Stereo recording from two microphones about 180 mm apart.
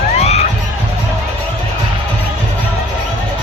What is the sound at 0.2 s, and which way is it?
Music, 35° left (ahead or behind).